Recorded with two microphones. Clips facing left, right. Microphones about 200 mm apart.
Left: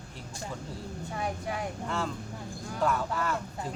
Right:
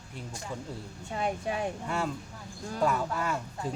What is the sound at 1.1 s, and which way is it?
Speech, 25° right (ahead or behind).